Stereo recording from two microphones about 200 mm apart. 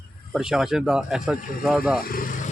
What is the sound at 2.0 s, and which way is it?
Vehicle, 45° left (ahead or behind).